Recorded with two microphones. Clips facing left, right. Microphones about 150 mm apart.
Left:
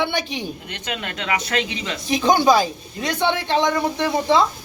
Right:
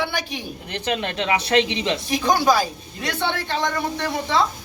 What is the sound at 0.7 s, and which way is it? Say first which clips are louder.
Speech: right 5 dB; 30° right (ahead or behind).